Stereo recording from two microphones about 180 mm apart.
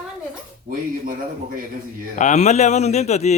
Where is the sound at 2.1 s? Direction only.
40° left (ahead or behind).